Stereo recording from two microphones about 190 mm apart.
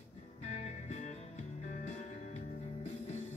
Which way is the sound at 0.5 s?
35° left (ahead or behind).